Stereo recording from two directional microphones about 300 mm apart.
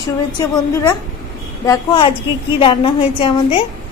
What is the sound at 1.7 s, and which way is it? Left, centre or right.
Child singing, centre.